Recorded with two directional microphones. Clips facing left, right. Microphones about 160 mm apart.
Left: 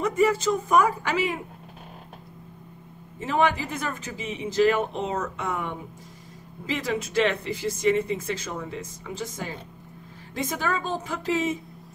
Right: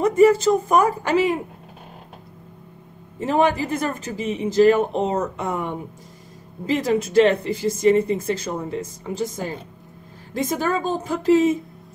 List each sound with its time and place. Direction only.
0.0 s speech: 40° right (ahead or behind)
3.2 s speech: 40° right (ahead or behind)
6.6 s speech: 40° right (ahead or behind)
10.3 s speech: 40° right (ahead or behind)